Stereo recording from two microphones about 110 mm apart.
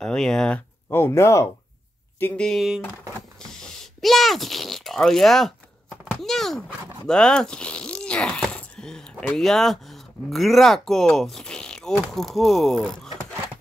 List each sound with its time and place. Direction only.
0.0 s speech: 5° left (ahead or behind)
0.8 s speech: 20° left (ahead or behind)
2.4 s speech: centre (ahead or behind)